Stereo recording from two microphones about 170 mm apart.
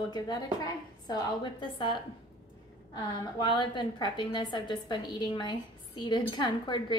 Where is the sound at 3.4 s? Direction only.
25° left (ahead or behind).